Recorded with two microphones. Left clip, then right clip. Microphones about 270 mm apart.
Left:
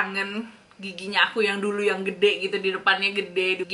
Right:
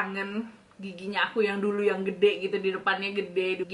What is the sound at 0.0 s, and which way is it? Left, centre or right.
A woman's voice, centre.